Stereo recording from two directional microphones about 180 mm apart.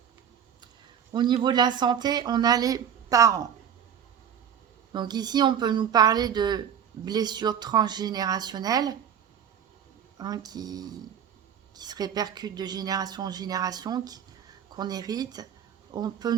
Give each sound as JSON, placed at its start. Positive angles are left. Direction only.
{"t": 1.1, "sound": "speech", "side_deg": -25}
{"t": 4.9, "sound": "speech", "side_deg": -25}
{"t": 10.2, "sound": "speech", "side_deg": -20}